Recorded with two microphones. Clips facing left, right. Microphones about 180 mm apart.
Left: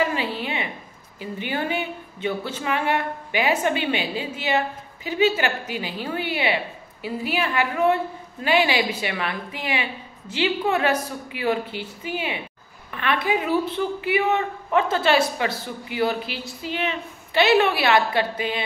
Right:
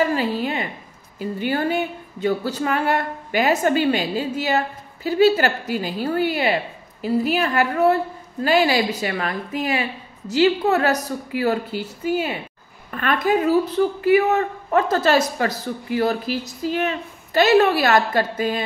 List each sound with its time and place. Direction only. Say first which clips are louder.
0.0 s a woman's voice: right 4 dB; 40° right (ahead or behind)